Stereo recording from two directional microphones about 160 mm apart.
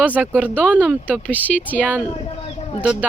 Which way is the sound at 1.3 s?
10° left (ahead or behind).